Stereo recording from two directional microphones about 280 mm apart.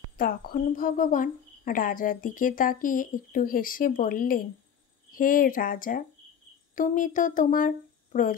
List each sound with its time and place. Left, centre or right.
0.2 s a woman's voice: left